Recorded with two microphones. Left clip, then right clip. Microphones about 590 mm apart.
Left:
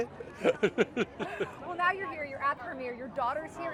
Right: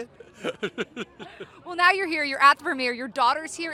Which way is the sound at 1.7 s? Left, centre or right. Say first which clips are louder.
Right 10 dB; right.